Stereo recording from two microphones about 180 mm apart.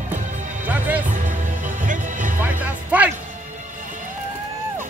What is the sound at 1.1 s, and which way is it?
Music, 45° right (ahead or behind).